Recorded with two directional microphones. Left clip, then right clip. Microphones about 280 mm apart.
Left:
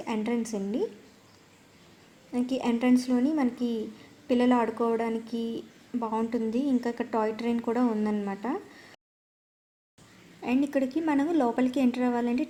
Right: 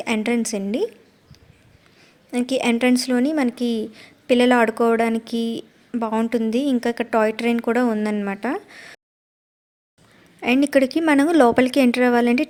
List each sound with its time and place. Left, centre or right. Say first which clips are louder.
0.0 s a woman's voice: right 9 dB; right
2.3 s a woman's voice: right 8 dB; right
10.4 s a woman's voice: right 10 dB; right